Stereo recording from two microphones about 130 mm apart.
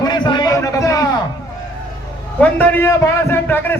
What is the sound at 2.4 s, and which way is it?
A man's voice, 10° left (ahead or behind).